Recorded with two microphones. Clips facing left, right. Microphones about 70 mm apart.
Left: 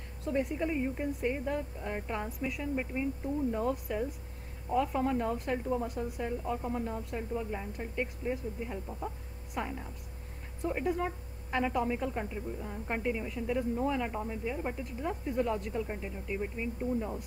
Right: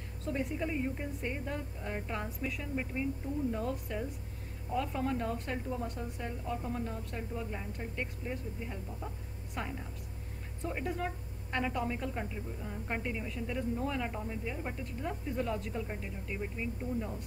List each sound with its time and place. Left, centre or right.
0.2 s a woman's voice: centre
6.4 s a woman's voice: centre
7.1 s a woman's voice: centre